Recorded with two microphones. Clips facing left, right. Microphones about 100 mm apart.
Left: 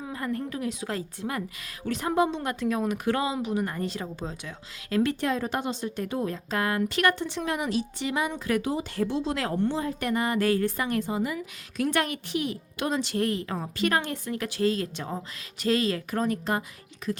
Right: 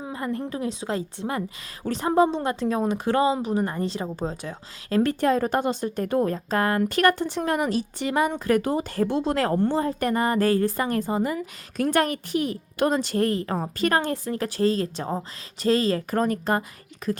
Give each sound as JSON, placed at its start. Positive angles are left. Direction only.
{"t": 0.0, "sound": "a woman's voice", "side_deg": -25}
{"t": 16.1, "sound": "speech", "side_deg": -45}